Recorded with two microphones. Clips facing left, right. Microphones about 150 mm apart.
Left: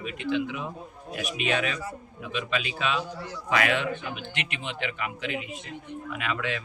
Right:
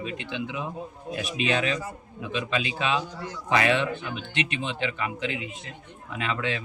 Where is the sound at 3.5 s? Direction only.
30° right (ahead or behind).